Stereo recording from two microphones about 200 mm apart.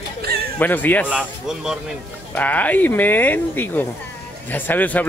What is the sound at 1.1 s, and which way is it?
Speech, 5° right (ahead or behind).